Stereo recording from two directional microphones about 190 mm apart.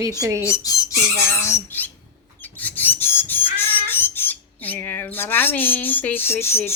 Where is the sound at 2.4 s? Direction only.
10° left (ahead or behind).